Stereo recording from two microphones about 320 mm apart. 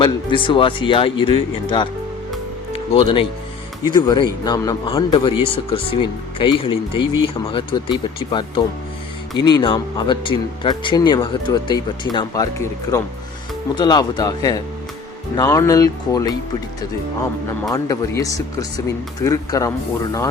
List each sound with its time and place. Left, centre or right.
0.0 s speech: centre
2.7 s speech: centre
17.7 s speech: centre